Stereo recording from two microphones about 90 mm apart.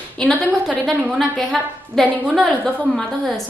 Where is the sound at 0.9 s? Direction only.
Centre (ahead or behind).